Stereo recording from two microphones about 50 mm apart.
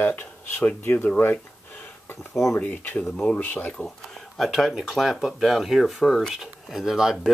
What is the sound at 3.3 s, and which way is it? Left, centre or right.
Speech, left.